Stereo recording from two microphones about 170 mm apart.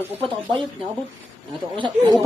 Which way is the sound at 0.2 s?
30° right (ahead or behind).